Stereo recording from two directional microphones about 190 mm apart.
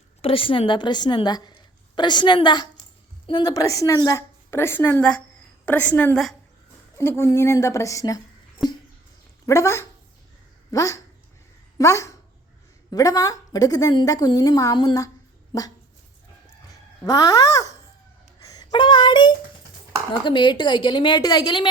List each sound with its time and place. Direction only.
0.2 s a woman's voice: 30° left (ahead or behind)
9.5 s a woman's voice: 15° left (ahead or behind)
17.1 s a woman's voice: 20° left (ahead or behind)